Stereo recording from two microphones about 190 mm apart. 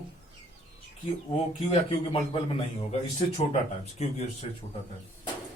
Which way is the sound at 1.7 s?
30° left (ahead or behind).